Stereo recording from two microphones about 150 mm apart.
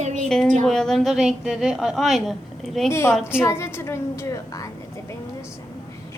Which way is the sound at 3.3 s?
15° left (ahead or behind).